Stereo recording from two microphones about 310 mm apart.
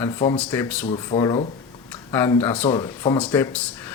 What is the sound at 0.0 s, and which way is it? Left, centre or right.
Speech, centre.